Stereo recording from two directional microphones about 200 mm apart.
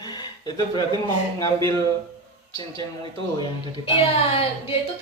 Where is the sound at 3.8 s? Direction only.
30° left (ahead or behind).